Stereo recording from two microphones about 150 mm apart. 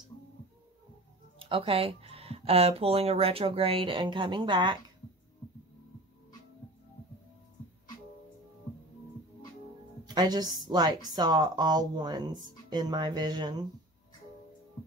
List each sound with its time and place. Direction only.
1.4 s speech: 35° right (ahead or behind)
10.0 s a woman's voice: 25° right (ahead or behind)